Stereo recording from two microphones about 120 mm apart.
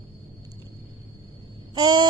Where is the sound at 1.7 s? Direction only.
35° right (ahead or behind).